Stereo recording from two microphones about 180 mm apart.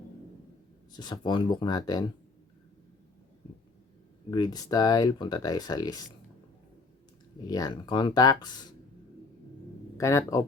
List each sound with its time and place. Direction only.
0.9 s speech: 25° left (ahead or behind)
4.3 s speech: 25° left (ahead or behind)
7.4 s speech: 20° left (ahead or behind)
10.0 s speech: 15° left (ahead or behind)